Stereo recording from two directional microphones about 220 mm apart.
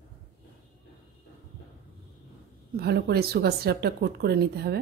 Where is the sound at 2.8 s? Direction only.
45° right (ahead or behind).